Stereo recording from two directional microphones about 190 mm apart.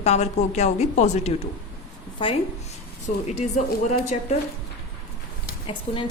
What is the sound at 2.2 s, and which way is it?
Speech, 25° left (ahead or behind).